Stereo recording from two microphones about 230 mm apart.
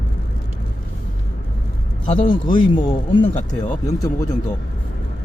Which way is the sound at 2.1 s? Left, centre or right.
Left.